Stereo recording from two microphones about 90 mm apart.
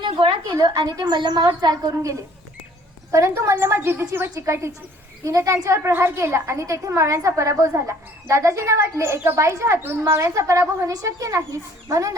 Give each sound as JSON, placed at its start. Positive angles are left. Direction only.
{"t": 0.0, "sound": "a sound", "side_deg": -60}
{"t": 0.6, "sound": "a woman's voice", "side_deg": -45}
{"t": 1.9, "sound": "a woman's voice", "side_deg": -35}